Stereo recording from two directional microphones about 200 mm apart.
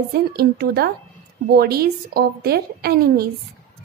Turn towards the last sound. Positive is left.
turn(degrees=-50)  # may be behind; listen again after turning